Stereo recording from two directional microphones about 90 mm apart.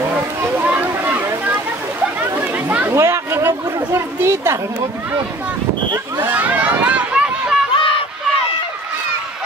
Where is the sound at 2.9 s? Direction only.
30° right (ahead or behind).